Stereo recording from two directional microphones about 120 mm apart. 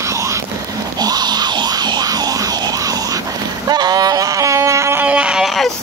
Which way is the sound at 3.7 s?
35° right (ahead or behind).